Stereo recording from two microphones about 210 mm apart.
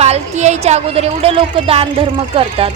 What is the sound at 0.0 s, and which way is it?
A woman's voice, 30° right (ahead or behind).